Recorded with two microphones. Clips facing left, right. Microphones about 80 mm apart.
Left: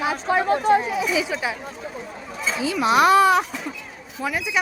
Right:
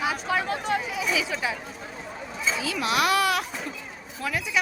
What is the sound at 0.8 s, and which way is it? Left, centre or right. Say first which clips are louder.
Speech: left 7 dB; left.